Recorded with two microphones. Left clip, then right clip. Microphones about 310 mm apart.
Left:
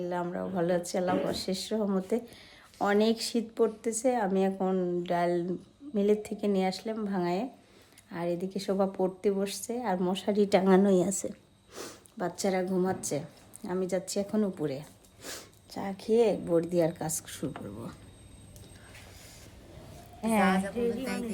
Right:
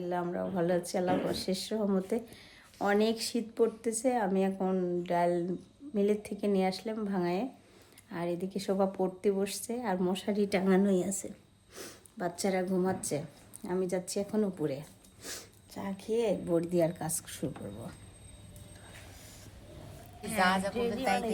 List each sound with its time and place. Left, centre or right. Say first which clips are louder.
0.0 s a woman's voice: left 1 dB; centre
20.5 s speech: left 1 dB; right